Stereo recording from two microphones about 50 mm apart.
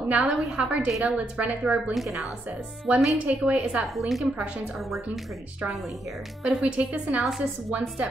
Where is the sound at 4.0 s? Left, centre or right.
Centre.